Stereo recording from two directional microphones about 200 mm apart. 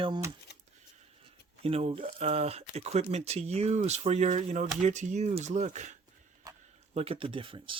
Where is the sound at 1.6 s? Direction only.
30° right (ahead or behind).